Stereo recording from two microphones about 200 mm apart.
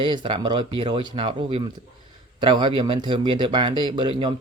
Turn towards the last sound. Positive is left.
turn(degrees=-25)  # may be behind; listen again after turning